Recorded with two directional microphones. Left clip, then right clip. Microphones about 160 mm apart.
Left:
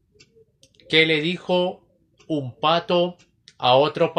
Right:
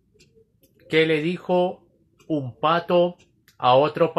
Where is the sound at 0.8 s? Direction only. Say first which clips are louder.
Left 2 dB; 5° left (ahead or behind).